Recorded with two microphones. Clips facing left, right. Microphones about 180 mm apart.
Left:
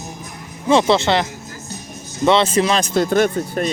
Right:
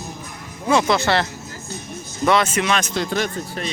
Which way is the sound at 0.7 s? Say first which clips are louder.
Left 3 dB; 30° left (ahead or behind).